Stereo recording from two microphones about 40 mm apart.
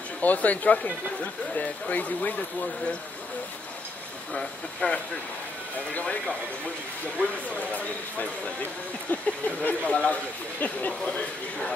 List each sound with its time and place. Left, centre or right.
0.2 s speech: left
4.8 s speech: left
9.1 s speech: left
9.8 s speech: left
10.6 s speech: left
11.1 s speech: left